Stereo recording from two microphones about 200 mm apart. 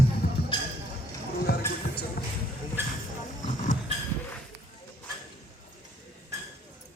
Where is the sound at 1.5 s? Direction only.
50° left (ahead or behind).